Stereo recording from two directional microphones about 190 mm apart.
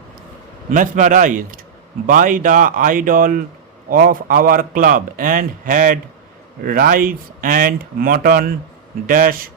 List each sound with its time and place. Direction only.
0.7 s a man's voice: 40° right (ahead or behind)